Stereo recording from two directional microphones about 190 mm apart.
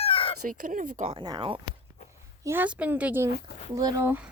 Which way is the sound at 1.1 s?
25° right (ahead or behind).